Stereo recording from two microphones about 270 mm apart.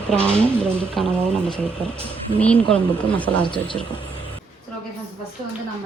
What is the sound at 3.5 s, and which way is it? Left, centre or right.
Speech, centre.